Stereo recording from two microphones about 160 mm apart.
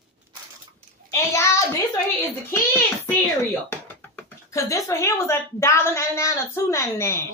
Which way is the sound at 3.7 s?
15° left (ahead or behind).